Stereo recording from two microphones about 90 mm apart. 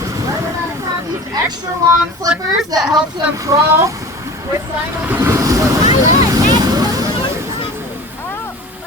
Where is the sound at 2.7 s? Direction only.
45° right (ahead or behind).